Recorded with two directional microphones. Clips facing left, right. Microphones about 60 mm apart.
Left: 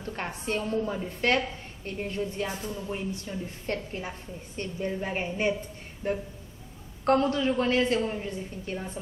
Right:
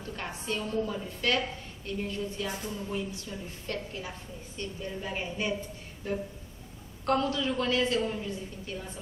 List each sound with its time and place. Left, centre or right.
0.0 s a woman's voice: left